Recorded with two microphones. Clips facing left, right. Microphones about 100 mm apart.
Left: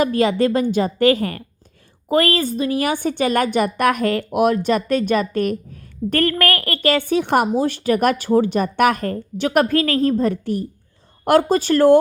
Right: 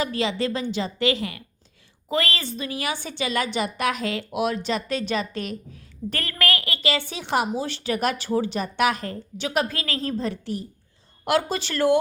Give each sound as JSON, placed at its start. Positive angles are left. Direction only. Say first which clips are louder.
{"t": 0.0, "sound": "a woman's voice", "louder": "left 8 dB", "side_deg": 50}